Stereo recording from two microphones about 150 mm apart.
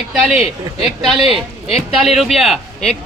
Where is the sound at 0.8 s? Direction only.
Centre (ahead or behind).